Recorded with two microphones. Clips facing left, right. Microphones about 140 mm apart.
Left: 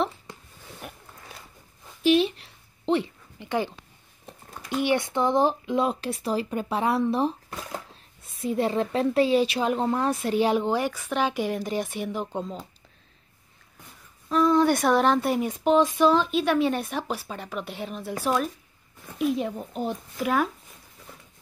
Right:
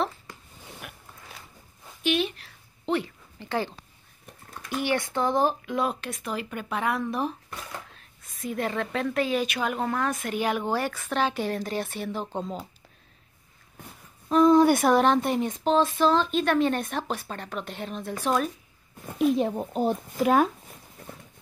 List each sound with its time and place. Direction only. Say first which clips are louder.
2.0 s a sound: left 6 dB; 30° left (ahead or behind)
3.3 s a sound: left 2 dB; 15° left (ahead or behind)
4.3 s speech: left 2 dB; 20° left (ahead or behind)
10.7 s speech: left 2 dB; 15° left (ahead or behind)
12.4 s speech: even; centre (ahead or behind)
14.3 s speech: right 3 dB; 25° right (ahead or behind)
14.6 s speech: right 1 dB; 5° right (ahead or behind)
19.1 s speech: right 3 dB; 35° right (ahead or behind)
20.2 s speech: right 3 dB; 25° right (ahead or behind)